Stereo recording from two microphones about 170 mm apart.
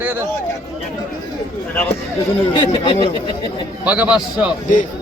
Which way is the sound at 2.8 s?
25° left (ahead or behind).